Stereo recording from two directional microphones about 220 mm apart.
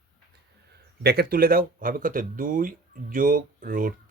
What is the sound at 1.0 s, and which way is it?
Speech, 45° right (ahead or behind).